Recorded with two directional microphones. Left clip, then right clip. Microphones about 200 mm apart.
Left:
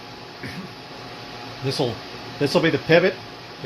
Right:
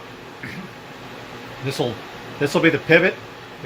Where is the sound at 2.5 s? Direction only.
30° left (ahead or behind).